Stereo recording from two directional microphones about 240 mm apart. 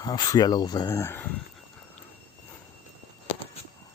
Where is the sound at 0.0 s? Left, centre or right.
Centre.